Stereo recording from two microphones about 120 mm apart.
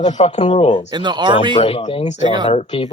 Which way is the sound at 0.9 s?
40° right (ahead or behind).